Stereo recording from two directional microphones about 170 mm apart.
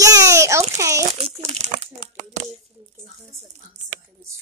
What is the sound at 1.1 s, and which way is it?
Speech, 40° right (ahead or behind).